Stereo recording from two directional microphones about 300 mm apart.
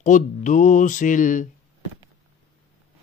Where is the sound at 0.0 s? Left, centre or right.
Left.